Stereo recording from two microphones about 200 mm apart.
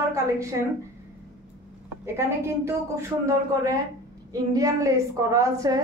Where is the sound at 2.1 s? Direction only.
15° right (ahead or behind).